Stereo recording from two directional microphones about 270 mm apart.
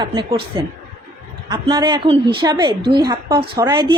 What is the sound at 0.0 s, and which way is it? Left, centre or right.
A woman's voice, centre.